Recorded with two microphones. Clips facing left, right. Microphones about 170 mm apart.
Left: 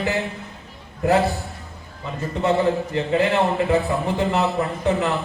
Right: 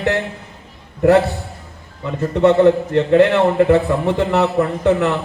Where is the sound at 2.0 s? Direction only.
70° right (ahead or behind).